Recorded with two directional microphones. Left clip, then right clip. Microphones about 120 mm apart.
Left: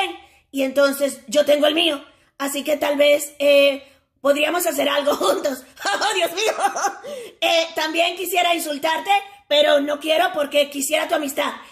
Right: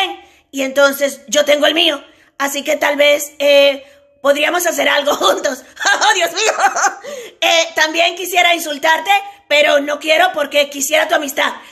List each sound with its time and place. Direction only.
0.6 s a child's voice: 15° left (ahead or behind)